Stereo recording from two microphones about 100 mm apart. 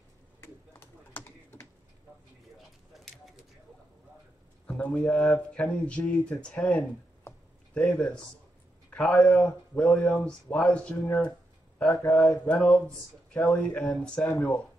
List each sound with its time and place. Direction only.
0.4 s typing: 25° left (ahead or behind)
4.6 s a sound: 15° left (ahead or behind)
4.9 s speech: 5° left (ahead or behind)
7.8 s speech: 10° left (ahead or behind)